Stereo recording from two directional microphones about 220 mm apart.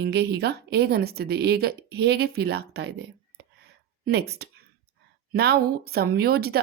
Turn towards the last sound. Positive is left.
turn(degrees=-45)  # may be behind; listen again after turning